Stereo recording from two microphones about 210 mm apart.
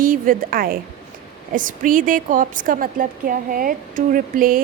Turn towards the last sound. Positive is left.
turn(degrees=-40)  # may be behind; listen again after turning